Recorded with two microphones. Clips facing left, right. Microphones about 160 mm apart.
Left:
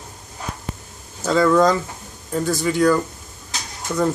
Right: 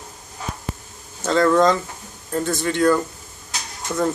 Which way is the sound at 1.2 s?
Centre (ahead or behind).